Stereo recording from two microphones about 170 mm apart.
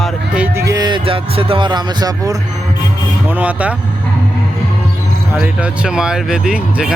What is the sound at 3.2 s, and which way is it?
Speech, 10° right (ahead or behind).